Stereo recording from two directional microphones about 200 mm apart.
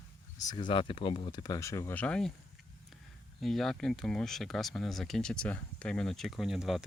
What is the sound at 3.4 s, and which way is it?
Speech, centre (ahead or behind).